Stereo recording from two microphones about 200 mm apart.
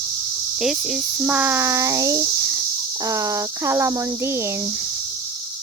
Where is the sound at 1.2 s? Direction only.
5° right (ahead or behind).